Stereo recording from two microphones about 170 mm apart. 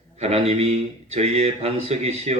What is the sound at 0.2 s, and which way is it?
Speech, 40° right (ahead or behind).